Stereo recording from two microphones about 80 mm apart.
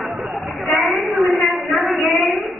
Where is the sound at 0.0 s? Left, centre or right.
Centre.